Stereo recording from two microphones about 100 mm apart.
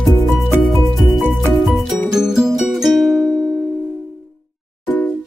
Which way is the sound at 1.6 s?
Centre (ahead or behind).